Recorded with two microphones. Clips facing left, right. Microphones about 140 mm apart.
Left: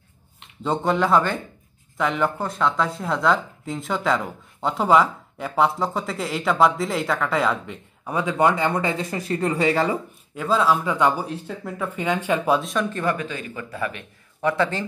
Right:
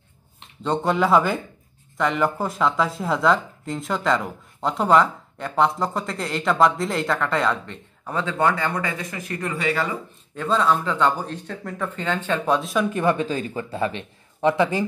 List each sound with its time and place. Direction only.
0.7 s speech: centre (ahead or behind); by 9.9 s 30° left (ahead or behind)
10.3 s speech: 5° left (ahead or behind)
12.9 s a man's voice: 25° right (ahead or behind)